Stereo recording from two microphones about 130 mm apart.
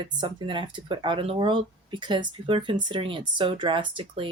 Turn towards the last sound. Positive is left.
turn(degrees=-40)  # may be behind; listen again after turning